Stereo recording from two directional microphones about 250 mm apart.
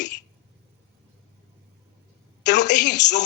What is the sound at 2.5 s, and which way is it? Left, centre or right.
Speech, left.